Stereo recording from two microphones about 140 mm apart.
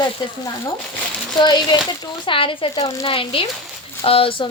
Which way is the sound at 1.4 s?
35° left (ahead or behind).